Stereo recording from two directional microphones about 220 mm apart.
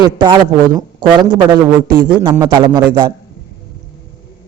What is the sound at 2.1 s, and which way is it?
Speech, 10° right (ahead or behind).